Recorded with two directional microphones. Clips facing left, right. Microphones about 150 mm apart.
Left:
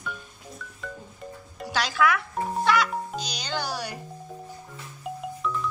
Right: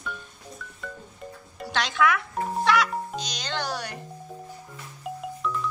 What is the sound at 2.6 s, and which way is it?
Music, centre (ahead or behind).